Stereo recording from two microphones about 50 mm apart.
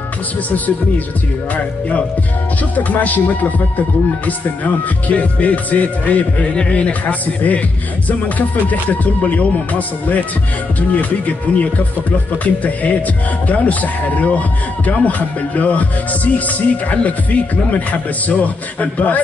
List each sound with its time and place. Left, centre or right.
0.5 s speech: left
1.5 s music: left
2.7 s speech: left
4.3 s music: left
8.1 s speech: left
11.0 s music: left
12.6 s speech: left